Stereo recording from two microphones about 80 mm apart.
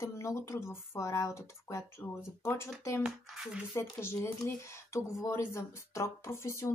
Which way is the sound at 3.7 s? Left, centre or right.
Left.